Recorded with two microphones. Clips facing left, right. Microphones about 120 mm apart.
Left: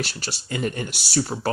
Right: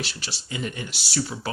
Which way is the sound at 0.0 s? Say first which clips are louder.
Left 4 dB; 45° left (ahead or behind).